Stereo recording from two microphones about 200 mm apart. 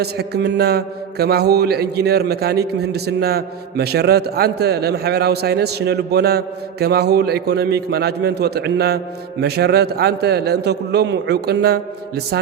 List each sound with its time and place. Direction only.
0.0 s a man's voice: 55° right (ahead or behind)